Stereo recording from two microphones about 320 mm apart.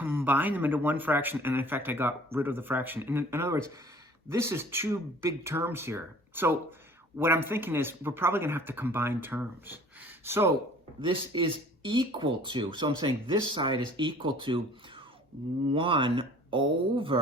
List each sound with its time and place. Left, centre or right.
0.0 s speech: centre